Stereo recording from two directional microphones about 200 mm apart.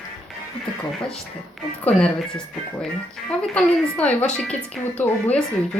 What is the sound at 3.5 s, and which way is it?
Speech, 5° left (ahead or behind).